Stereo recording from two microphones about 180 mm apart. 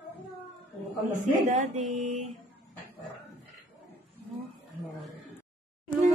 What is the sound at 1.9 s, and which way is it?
Speech, 40° right (ahead or behind).